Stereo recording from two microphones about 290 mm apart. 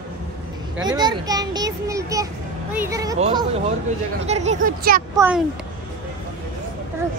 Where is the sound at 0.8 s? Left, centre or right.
Centre.